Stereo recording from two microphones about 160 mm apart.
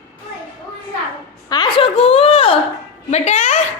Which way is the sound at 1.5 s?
30° left (ahead or behind).